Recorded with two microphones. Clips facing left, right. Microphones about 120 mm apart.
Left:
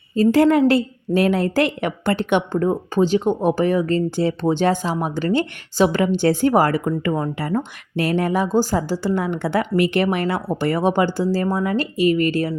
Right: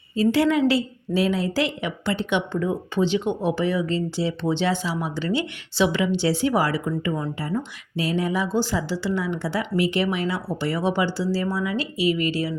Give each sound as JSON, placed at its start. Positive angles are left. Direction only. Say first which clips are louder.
{"t": 0.2, "sound": "a woman's voice", "louder": "left 5 dB", "side_deg": 45}